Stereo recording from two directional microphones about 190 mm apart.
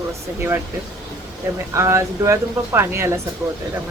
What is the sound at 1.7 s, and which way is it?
Speech, 15° right (ahead or behind).